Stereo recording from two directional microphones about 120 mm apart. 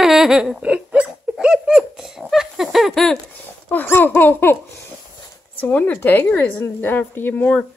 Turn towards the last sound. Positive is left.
turn(degrees=15)  # may be behind; listen again after turning